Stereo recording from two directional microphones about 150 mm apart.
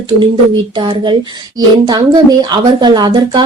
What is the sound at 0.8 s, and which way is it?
A woman's voice, 30° right (ahead or behind).